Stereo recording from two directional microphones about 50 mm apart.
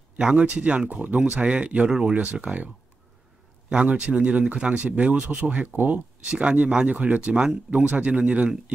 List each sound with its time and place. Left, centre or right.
0.2 s speech: right
2.3 s speech: right
6.2 s speech: right
7.3 s speech: centre
7.8 s speech: right